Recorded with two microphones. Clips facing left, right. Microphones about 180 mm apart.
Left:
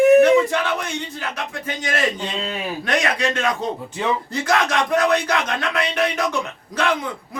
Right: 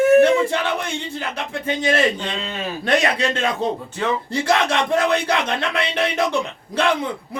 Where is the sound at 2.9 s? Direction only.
30° right (ahead or behind).